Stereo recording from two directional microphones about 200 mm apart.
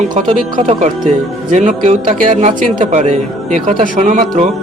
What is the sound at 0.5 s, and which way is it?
Speech, 30° right (ahead or behind).